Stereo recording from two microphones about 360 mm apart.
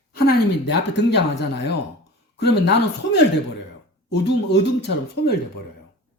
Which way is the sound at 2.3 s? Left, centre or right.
Left.